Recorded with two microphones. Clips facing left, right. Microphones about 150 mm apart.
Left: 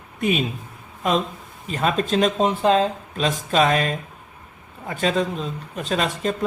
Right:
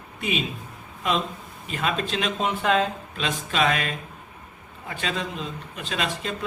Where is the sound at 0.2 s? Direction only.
45° left (ahead or behind).